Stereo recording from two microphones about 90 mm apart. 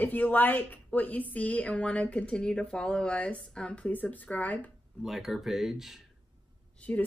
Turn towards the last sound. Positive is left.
turn(degrees=15)  # may be behind; listen again after turning